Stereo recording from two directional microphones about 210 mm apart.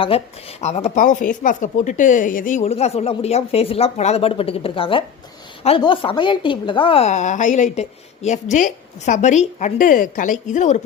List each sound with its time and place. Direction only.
0.1 s speech: 30° left (ahead or behind)